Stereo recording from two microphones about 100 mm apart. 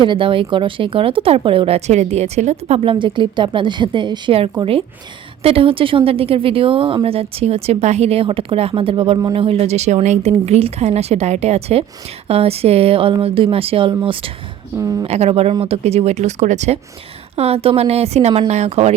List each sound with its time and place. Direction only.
0.0 s speech: 55° right (ahead or behind); by 2.9 s 90° right
2.9 s speech: 55° right (ahead or behind)
5.4 s a woman's voice: 75° right (ahead or behind)
14.8 s speech: 30° right (ahead or behind)
15.0 s speech: 90° right